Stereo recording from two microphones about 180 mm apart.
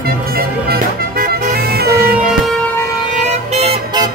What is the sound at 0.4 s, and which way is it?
Music, 55° right (ahead or behind).